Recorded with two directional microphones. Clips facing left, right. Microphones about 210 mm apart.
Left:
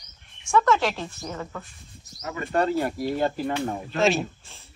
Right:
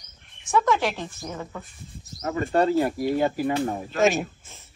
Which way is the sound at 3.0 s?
10° right (ahead or behind).